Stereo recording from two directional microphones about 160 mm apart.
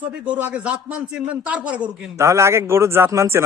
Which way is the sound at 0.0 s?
10° right (ahead or behind).